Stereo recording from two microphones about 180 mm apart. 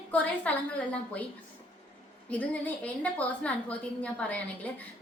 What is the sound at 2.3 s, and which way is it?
A woman's voice, 10° left (ahead or behind).